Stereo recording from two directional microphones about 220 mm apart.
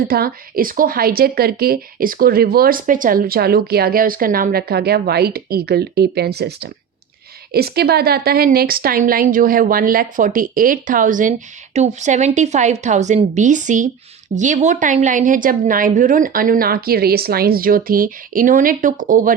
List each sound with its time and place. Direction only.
0.1 s a woman's voice: 40° right (ahead or behind)